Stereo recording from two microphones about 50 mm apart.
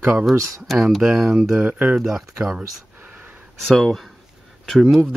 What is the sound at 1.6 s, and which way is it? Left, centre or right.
Speech, right.